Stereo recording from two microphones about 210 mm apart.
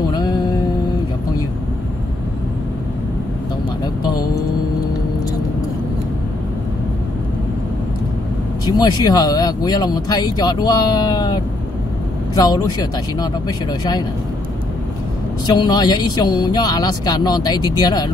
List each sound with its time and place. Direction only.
0.1 s music: 20° left (ahead or behind)
8.6 s speech: 20° left (ahead or behind)
15.4 s speech: 20° left (ahead or behind)